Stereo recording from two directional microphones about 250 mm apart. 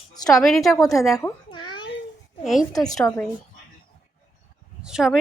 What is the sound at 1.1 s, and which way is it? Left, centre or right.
Babbling, centre.